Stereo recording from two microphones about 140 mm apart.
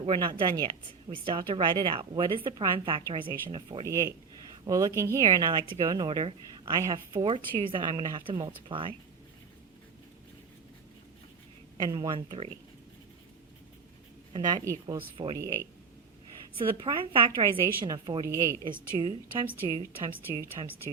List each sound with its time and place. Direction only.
0.0 s a woman's voice: 35° right (ahead or behind)
3.8 s a woman's voice: 25° right (ahead or behind)
11.8 s speech: 30° right (ahead or behind)
12.1 s a woman's voice: 40° right (ahead or behind)
14.3 s a woman's voice: 30° right (ahead or behind)
14.9 s a woman's voice: 40° right (ahead or behind)
16.6 s a woman's voice: 40° right (ahead or behind)